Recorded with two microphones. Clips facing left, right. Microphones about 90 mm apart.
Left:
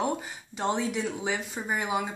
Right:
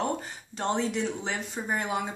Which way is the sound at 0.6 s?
5° left (ahead or behind).